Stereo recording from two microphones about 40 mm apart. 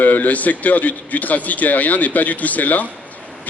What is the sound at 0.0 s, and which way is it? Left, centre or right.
A man's voice, left.